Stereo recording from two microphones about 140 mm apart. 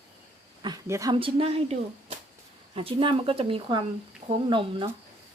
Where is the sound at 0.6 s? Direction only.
20° right (ahead or behind).